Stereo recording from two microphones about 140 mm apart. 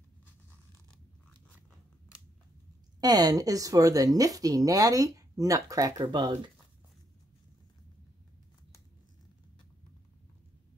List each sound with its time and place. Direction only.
3.0 s speech: 25° right (ahead or behind)